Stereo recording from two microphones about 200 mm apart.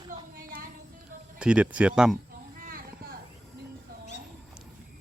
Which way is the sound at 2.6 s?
45° right (ahead or behind).